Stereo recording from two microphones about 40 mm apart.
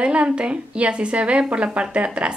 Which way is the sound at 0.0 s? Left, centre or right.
Right.